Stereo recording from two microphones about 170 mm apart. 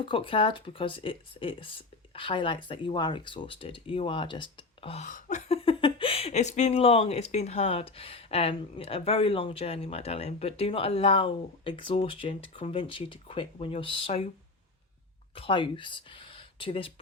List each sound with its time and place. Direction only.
0.0 s speech: 30° left (ahead or behind)
5.0 s speech: 45° left (ahead or behind)
15.4 s speech: 30° left (ahead or behind)